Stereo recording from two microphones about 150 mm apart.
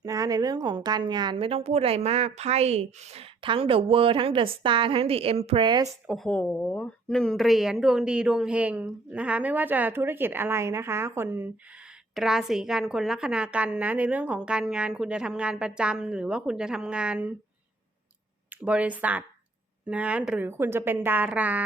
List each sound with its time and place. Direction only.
0.0 s speech: 25° right (ahead or behind)
6.1 s speech: 5° left (ahead or behind); by 11.5 s 15° right (ahead or behind)
12.1 s a woman's voice: 5° right (ahead or behind)
18.6 s speech: 10° right (ahead or behind)